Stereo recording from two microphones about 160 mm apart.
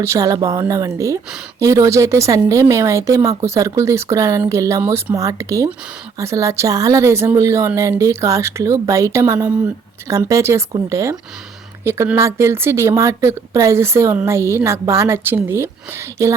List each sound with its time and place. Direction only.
0.0 s speech: 20° right (ahead or behind)